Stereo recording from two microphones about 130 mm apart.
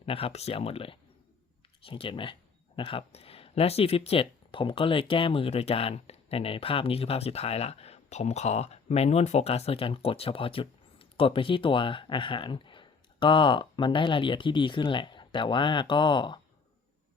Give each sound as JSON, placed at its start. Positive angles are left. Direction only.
{"t": 0.0, "sound": "speech", "side_deg": 50}